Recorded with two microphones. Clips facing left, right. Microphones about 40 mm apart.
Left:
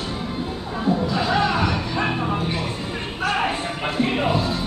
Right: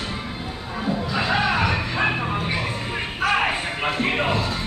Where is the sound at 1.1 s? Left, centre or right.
Centre.